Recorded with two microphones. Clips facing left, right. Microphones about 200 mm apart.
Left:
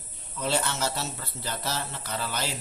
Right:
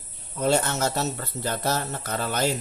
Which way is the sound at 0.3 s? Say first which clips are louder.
Right 6 dB; 50° right (ahead or behind).